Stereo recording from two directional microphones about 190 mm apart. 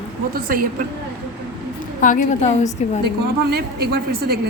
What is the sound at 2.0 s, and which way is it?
Speech, 45° left (ahead or behind).